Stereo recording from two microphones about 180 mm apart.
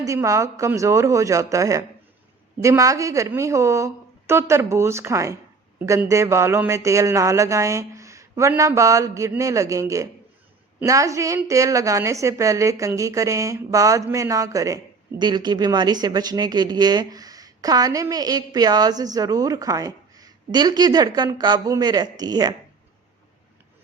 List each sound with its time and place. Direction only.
0.0 s speech: 15° right (ahead or behind)